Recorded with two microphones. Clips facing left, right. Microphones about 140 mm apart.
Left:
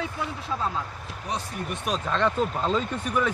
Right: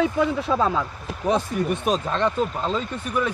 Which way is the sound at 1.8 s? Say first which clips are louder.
Left 1 dB; 20° right (ahead or behind).